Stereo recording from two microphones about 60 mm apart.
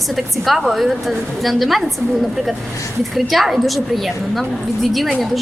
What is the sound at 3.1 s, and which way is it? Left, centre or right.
Speech, centre.